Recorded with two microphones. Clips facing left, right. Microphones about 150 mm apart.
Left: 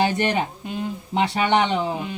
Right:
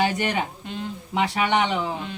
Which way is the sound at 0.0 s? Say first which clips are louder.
Left 2 dB; 30° left (ahead or behind).